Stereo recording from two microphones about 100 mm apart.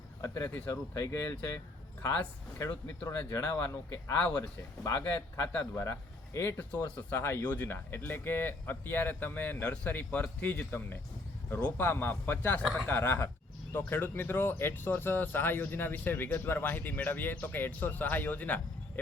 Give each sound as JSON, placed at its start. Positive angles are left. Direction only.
{"t": 0.3, "sound": "speech", "side_deg": 25}
{"t": 6.6, "sound": "speech", "side_deg": 15}